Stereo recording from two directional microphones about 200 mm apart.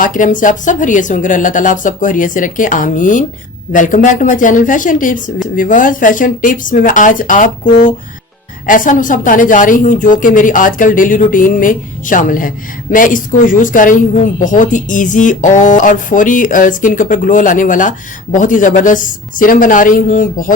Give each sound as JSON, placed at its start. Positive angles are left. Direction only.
{"t": 0.0, "sound": "speech", "side_deg": 40}